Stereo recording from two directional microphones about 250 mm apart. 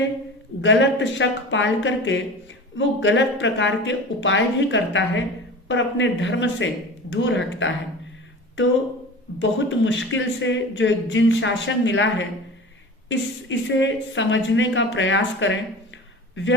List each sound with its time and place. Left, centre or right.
0.6 s speech: left
9.4 s speech: left